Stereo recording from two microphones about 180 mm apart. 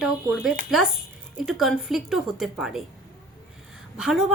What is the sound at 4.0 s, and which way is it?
Speech, centre (ahead or behind).